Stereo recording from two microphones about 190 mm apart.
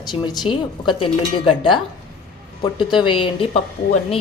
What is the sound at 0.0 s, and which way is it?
Speech, 20° left (ahead or behind).